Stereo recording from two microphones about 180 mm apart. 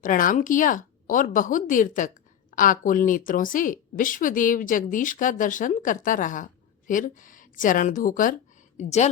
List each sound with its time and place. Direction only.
0.0 s a woman's voice: 50° left (ahead or behind)